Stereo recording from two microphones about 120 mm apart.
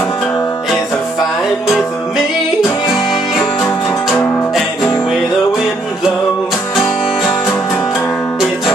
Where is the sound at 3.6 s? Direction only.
15° left (ahead or behind).